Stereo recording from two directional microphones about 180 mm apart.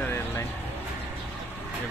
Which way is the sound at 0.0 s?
10° left (ahead or behind).